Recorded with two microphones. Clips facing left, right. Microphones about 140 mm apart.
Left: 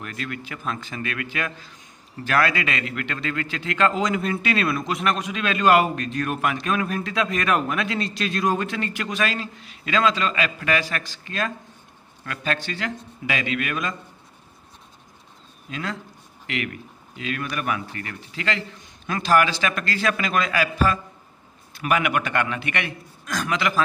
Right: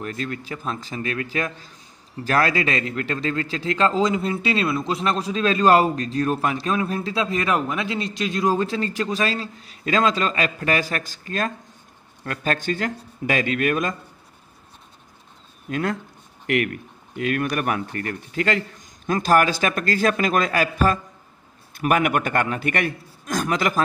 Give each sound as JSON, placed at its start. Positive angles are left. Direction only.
{"t": 0.0, "sound": "a man's voice", "side_deg": -35}
{"t": 15.7, "sound": "speech", "side_deg": -50}